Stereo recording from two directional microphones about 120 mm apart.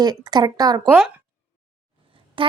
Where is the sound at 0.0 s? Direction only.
35° right (ahead or behind).